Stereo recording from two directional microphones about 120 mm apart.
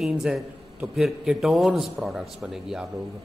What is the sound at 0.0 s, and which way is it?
A man's voice, 5° right (ahead or behind).